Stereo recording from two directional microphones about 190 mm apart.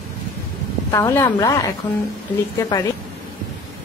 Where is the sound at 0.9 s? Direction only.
20° left (ahead or behind).